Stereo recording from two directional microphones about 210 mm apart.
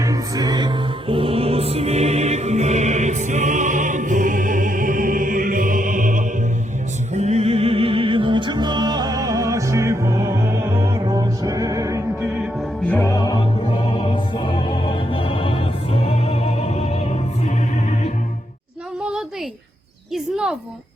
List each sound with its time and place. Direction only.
0.0 s music: 15° right (ahead or behind)
12.9 s music: 15° left (ahead or behind); by 17.5 s 30° left (ahead or behind)
20.1 s a sound: 5° right (ahead or behind)